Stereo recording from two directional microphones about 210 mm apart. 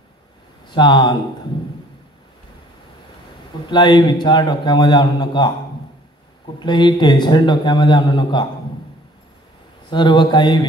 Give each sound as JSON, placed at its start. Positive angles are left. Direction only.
{"t": 0.7, "sound": "speech", "side_deg": 20}
{"t": 3.6, "sound": "a man's voice", "side_deg": 20}
{"t": 6.6, "sound": "a man's voice", "side_deg": 20}
{"t": 9.8, "sound": "a man's voice", "side_deg": 20}